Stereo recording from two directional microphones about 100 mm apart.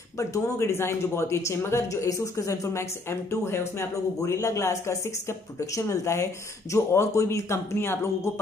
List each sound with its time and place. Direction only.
0.2 s a man's voice: 30° left (ahead or behind)